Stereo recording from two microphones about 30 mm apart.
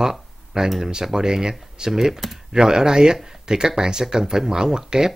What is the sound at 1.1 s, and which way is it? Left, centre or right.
Speech, right.